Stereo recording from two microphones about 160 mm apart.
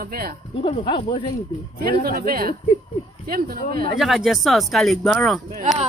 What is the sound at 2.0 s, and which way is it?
A woman's voice, 65° right (ahead or behind).